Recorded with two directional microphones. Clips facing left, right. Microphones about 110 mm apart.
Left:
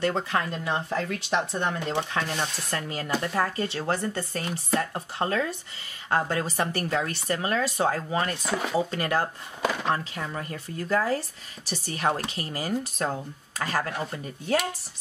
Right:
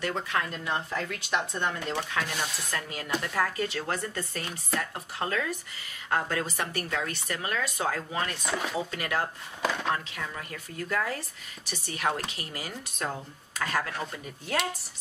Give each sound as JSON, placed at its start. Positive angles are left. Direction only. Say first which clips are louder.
{"t": 0.0, "sound": "speech", "louder": "left 4 dB", "side_deg": 30}
{"t": 8.4, "sound": "speech", "louder": "left 3 dB", "side_deg": 0}
{"t": 8.9, "sound": "speech", "louder": "left 4 dB", "side_deg": 35}
{"t": 9.6, "sound": "a sound", "louder": "left 2 dB", "side_deg": 5}
{"t": 9.8, "sound": "speech", "louder": "left 3 dB", "side_deg": 35}